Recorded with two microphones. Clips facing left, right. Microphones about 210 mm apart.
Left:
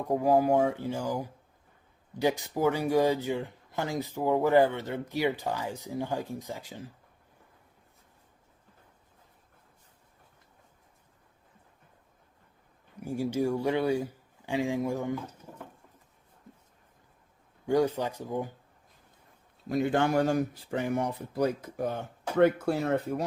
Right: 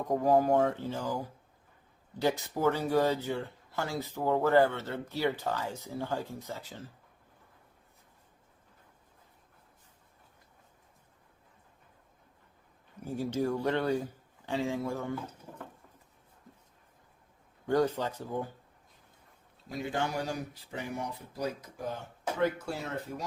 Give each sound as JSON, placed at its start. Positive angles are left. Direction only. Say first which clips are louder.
{"t": 0.0, "sound": "speech", "louder": "left 1 dB", "side_deg": 10}
{"t": 13.0, "sound": "speech", "louder": "left 3 dB", "side_deg": 10}
{"t": 17.7, "sound": "speech", "louder": "left 2 dB", "side_deg": 10}
{"t": 19.6, "sound": "speech", "louder": "left 8 dB", "side_deg": 55}